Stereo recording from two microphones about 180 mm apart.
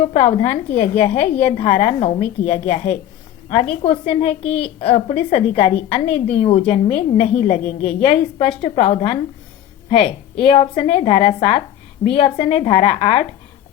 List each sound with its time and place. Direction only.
0.0 s a woman's voice: 40° left (ahead or behind)